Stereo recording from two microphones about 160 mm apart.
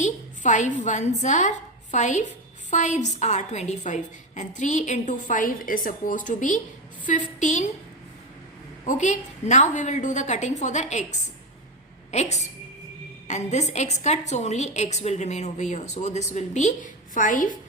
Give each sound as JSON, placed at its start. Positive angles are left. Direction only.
{"t": 0.0, "sound": "a woman's voice", "side_deg": 50}
{"t": 8.8, "sound": "a woman's voice", "side_deg": 50}
{"t": 12.1, "sound": "a woman's voice", "side_deg": 45}